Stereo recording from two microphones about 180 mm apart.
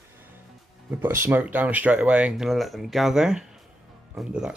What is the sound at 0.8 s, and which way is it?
Speech, 10° right (ahead or behind).